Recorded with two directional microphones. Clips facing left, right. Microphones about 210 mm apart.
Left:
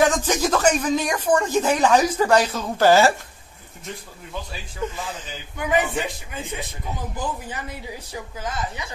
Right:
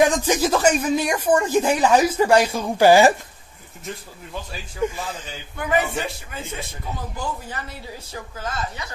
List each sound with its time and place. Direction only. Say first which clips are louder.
0.0 s speech: right 2 dB; 10° right (ahead or behind)
4.8 s speech: right 5 dB; 10° right (ahead or behind)
5.6 s a man's voice: even; 15° left (ahead or behind)